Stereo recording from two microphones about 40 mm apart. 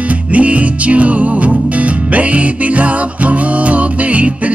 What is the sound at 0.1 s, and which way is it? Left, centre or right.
Music, right.